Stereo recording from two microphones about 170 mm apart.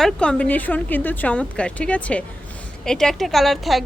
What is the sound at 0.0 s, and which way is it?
Speech, 5° left (ahead or behind).